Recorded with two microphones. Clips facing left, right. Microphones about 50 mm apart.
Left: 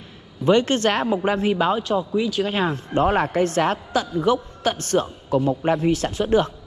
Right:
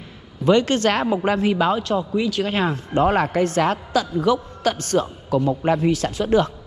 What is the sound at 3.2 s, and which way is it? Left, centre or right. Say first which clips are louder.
Speech: right 1 dB; right.